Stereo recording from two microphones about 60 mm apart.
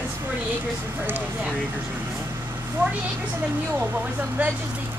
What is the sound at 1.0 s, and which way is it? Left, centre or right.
Speech, right.